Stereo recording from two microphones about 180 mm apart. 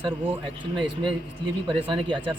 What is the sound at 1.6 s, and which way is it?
Speech, 30° right (ahead or behind).